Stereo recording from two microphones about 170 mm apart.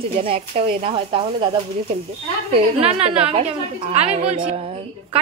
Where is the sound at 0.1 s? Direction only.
35° right (ahead or behind).